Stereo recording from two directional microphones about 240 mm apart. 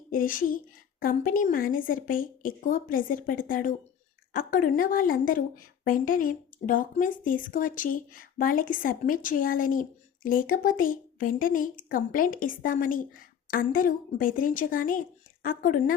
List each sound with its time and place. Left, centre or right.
0.1 s a woman's voice: left